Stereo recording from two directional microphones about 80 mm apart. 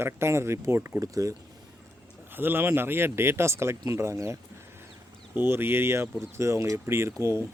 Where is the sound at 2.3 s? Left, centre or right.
Right.